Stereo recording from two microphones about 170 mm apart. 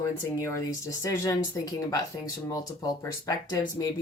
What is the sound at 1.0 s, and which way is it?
Speech, 15° left (ahead or behind).